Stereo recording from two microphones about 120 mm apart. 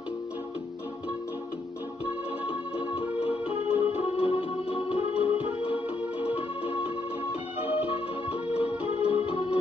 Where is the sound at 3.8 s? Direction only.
50° left (ahead or behind).